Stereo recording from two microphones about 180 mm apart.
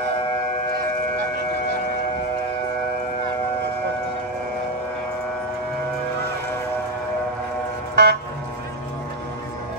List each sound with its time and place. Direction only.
7.9 s vehicle: 65° right (ahead or behind)